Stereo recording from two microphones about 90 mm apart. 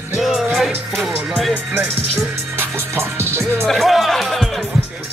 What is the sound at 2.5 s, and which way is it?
Music, 25° right (ahead or behind).